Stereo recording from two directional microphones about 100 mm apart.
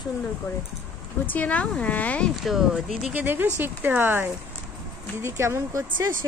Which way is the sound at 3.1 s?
20° right (ahead or behind).